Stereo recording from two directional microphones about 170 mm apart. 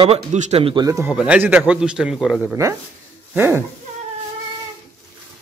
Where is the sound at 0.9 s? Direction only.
15° right (ahead or behind).